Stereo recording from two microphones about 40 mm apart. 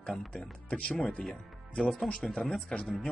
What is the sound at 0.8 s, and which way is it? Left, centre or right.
Speech, centre.